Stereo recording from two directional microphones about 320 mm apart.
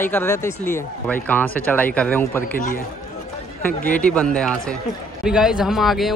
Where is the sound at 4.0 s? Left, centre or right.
Centre.